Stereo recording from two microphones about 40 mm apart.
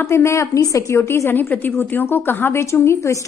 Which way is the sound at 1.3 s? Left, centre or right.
Left.